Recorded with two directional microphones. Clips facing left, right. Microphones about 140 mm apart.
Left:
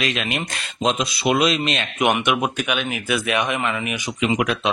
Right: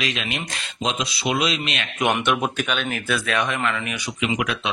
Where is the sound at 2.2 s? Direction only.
10° left (ahead or behind).